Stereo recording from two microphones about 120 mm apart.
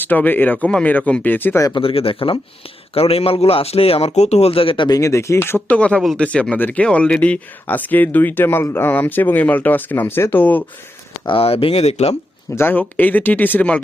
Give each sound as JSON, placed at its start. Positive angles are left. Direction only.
{"t": 0.0, "sound": "speech", "side_deg": 15}
{"t": 1.7, "sound": "a man's voice", "side_deg": 50}
{"t": 4.9, "sound": "speech", "side_deg": 25}
{"t": 11.3, "sound": "a man's voice", "side_deg": 50}
{"t": 12.5, "sound": "speech", "side_deg": 20}